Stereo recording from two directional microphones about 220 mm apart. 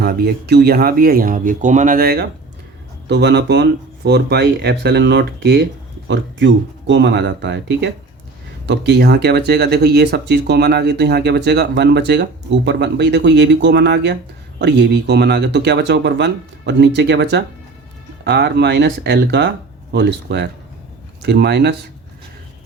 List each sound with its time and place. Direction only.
0.0 s speech: 45° right (ahead or behind)